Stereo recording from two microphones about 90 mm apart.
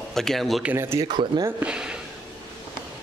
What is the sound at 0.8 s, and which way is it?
Speech, 30° right (ahead or behind).